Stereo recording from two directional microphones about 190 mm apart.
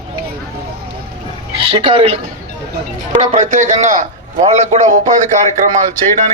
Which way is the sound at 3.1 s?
40° right (ahead or behind).